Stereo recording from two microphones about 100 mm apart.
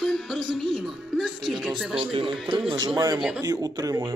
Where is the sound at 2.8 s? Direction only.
40° right (ahead or behind).